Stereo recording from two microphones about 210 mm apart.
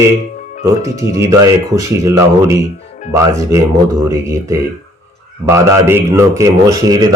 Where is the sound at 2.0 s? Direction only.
15° right (ahead or behind).